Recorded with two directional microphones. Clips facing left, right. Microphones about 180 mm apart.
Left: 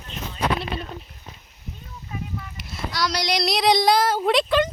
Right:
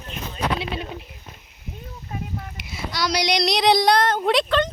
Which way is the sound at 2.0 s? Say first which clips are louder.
Right 1 dB; 45° right (ahead or behind).